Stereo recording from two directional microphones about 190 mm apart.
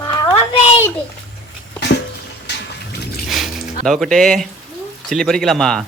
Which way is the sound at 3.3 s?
Centre (ahead or behind).